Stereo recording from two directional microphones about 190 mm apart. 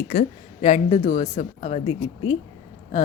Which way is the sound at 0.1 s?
50° left (ahead or behind).